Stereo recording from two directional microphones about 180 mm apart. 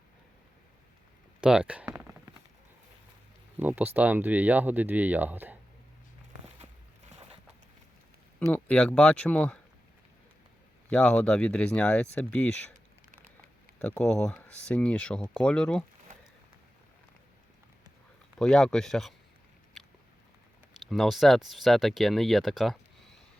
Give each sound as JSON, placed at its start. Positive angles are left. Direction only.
{"t": 1.4, "sound": "a sound", "side_deg": -5}
{"t": 3.6, "sound": "speech", "side_deg": -10}
{"t": 8.4, "sound": "speech", "side_deg": 10}
{"t": 10.8, "sound": "speech", "side_deg": 5}
{"t": 13.7, "sound": "speech", "side_deg": 5}
{"t": 18.3, "sound": "speech", "side_deg": 5}
{"t": 20.8, "sound": "speech", "side_deg": 0}